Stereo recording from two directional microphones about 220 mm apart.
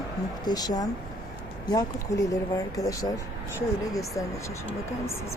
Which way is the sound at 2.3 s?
15° left (ahead or behind).